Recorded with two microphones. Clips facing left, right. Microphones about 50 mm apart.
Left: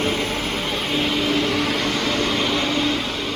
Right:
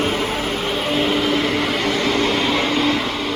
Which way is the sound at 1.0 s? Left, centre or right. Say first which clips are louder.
Right 2 dB; right.